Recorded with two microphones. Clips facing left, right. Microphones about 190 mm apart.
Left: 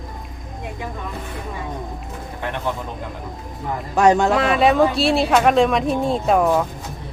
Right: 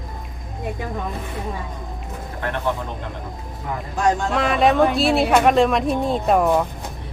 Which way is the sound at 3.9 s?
70° left (ahead or behind).